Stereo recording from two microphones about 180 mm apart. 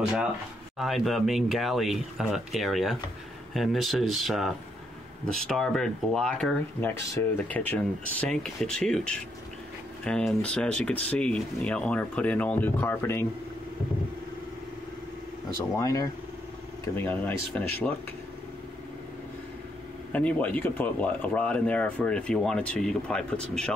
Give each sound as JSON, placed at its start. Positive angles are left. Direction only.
{"t": 0.0, "sound": "speech", "side_deg": -5}
{"t": 15.8, "sound": "speech", "side_deg": 20}
{"t": 20.1, "sound": "speech", "side_deg": 10}